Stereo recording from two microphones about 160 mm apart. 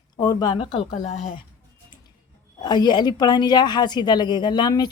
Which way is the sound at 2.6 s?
25° left (ahead or behind).